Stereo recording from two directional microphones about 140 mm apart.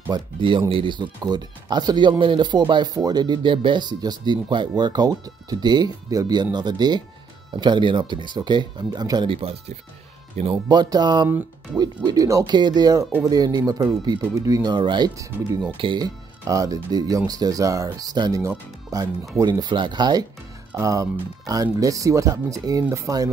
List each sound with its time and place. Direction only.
0.1 s speech: 35° right (ahead or behind)
10.7 s speech: 30° right (ahead or behind)
16.4 s speech: 25° right (ahead or behind)